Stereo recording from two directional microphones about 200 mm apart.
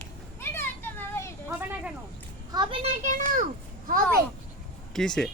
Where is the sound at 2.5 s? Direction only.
25° right (ahead or behind).